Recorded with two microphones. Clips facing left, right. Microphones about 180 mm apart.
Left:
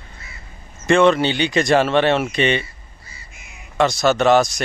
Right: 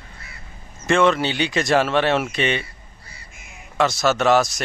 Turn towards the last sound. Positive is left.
turn(degrees=-5)  # may be behind; listen again after turning